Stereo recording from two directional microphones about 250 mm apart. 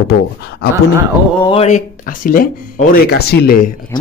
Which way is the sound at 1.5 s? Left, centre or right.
Left.